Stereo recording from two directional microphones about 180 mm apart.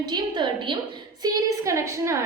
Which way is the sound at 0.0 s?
25° right (ahead or behind).